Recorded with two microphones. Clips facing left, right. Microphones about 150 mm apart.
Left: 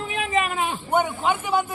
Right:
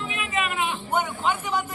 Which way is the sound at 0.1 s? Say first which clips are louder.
Left 6 dB; 40° left (ahead or behind).